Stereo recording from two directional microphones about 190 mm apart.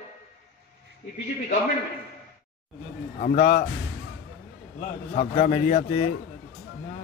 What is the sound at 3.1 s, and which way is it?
Speech, 40° left (ahead or behind).